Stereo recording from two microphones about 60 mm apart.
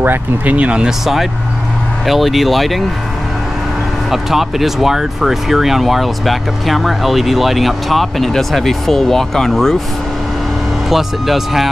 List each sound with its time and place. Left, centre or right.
0.0 s speech: right
0.6 s speech: right
0.8 s speech: centre
4.1 s speech: centre
10.9 s speech: centre